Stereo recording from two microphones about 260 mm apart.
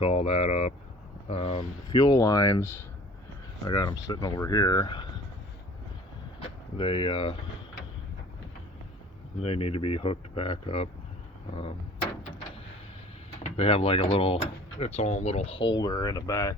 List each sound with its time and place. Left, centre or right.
0.0 s speech: left
3.6 s speech: centre
6.7 s speech: left
9.4 s speech: left
13.4 s speech: left